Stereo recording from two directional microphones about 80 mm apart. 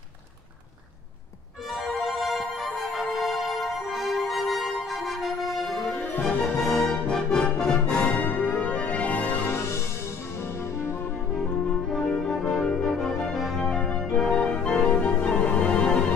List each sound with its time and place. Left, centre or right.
1.7 s music: centre
9.5 s music: left
11.9 s brass instrument: centre